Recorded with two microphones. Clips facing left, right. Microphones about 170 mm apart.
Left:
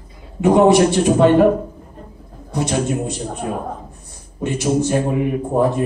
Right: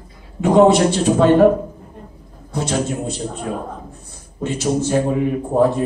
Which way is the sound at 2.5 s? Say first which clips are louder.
Left 1 dB; 15° left (ahead or behind).